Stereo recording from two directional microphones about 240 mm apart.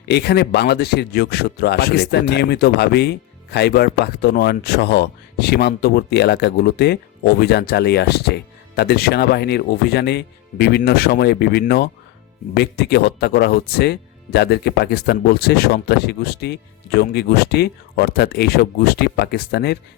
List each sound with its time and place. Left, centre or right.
0.1 s speech: left